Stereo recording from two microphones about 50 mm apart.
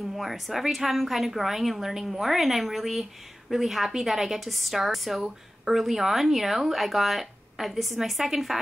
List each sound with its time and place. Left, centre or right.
0.0 s a woman's voice: centre